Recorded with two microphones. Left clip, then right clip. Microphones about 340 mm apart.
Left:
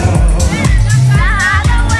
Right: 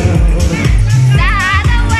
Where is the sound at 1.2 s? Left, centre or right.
Centre.